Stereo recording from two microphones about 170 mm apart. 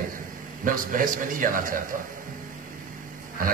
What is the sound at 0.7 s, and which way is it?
A man's voice, 55° right (ahead or behind).